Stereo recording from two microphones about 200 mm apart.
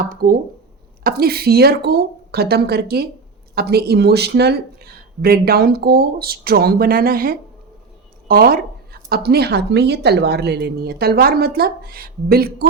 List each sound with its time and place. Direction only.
0.0 s speech: 45° right (ahead or behind)